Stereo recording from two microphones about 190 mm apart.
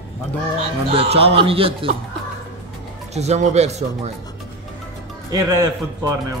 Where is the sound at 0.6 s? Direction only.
30° right (ahead or behind).